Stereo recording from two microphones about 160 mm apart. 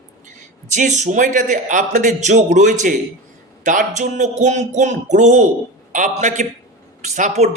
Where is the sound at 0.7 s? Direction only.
50° right (ahead or behind).